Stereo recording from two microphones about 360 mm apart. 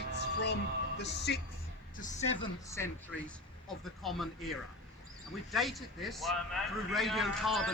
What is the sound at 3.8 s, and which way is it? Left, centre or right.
A man's voice, centre.